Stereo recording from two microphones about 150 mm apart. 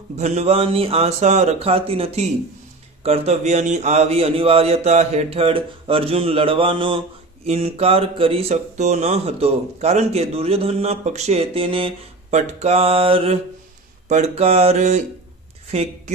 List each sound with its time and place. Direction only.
0.2 s speech: 50° right (ahead or behind)